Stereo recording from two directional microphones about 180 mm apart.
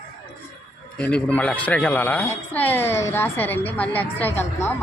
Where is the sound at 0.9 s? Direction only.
5° left (ahead or behind).